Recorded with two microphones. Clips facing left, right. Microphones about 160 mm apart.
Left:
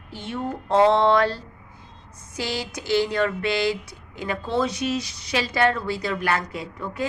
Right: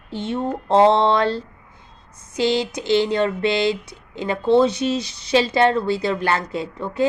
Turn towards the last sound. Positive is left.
turn(degrees=-25)  # may be behind; listen again after turning